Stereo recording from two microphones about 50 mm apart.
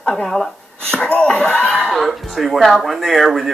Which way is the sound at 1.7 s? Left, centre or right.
Centre.